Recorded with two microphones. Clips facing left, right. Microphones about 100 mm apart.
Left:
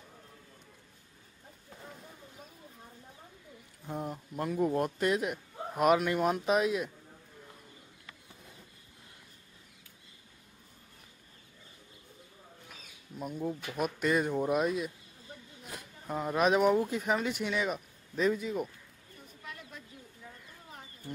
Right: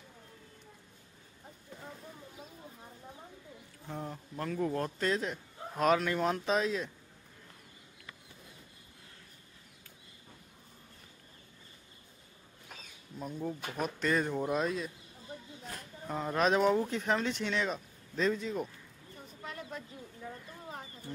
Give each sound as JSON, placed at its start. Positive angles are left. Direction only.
{"t": 3.8, "sound": "speech", "side_deg": 15}
{"t": 13.2, "sound": "speech", "side_deg": 10}
{"t": 19.4, "sound": "a sound", "side_deg": -40}